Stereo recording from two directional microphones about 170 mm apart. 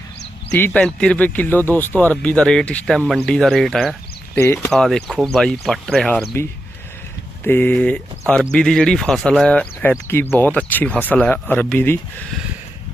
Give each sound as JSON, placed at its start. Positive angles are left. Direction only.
{"t": 0.5, "sound": "speech", "side_deg": 10}
{"t": 4.4, "sound": "speech", "side_deg": 15}
{"t": 4.7, "sound": "speech", "side_deg": 0}
{"t": 7.4, "sound": "speech", "side_deg": 10}